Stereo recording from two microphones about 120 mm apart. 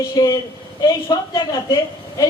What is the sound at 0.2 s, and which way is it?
A woman's voice, 35° left (ahead or behind).